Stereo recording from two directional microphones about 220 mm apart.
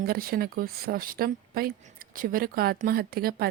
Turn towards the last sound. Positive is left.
turn(degrees=-45)  # may be behind; listen again after turning